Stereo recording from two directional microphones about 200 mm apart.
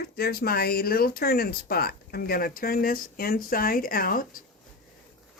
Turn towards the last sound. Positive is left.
turn(degrees=45)  # may be behind; listen again after turning